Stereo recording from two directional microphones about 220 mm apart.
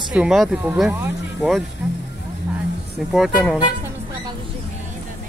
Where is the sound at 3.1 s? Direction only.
Centre (ahead or behind).